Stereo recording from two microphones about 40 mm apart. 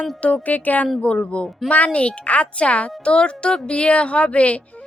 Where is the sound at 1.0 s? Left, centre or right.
Left.